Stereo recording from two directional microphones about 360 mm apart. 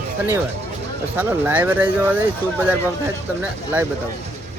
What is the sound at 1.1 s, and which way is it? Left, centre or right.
Speech, centre.